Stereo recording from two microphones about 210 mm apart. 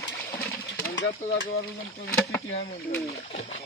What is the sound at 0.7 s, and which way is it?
Pigeon, 55° left (ahead or behind).